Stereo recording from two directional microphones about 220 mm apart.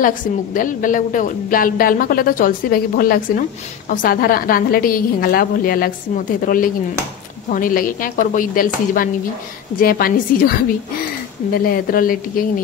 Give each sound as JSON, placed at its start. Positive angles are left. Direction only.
{"t": 0.0, "sound": "a woman's voice", "side_deg": 35}
{"t": 11.5, "sound": "a woman's voice", "side_deg": 40}